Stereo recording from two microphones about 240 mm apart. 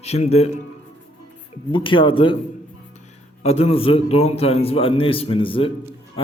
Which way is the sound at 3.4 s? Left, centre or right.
Left.